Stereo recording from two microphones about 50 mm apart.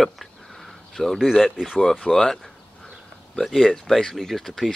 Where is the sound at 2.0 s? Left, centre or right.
Centre.